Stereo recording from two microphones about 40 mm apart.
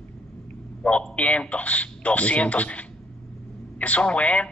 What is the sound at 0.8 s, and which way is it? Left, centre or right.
A man's voice, left.